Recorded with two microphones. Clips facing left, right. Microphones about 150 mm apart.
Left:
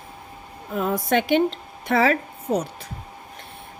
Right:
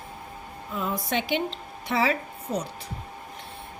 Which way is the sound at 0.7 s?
60° left (ahead or behind).